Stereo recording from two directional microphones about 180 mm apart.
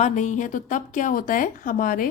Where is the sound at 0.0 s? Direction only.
45° left (ahead or behind).